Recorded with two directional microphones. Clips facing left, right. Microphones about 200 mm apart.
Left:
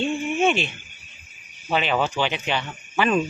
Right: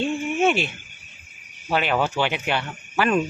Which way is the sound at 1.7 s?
10° right (ahead or behind).